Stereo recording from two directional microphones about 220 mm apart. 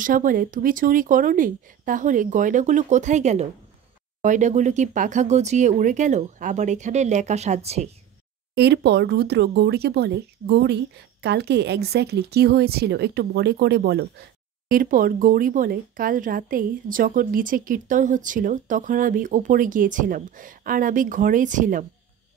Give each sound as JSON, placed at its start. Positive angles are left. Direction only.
{"t": 0.0, "sound": "speech", "side_deg": -40}
{"t": 8.5, "sound": "speech", "side_deg": -50}